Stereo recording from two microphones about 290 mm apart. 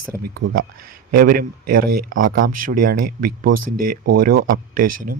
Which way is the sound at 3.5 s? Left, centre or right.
Right.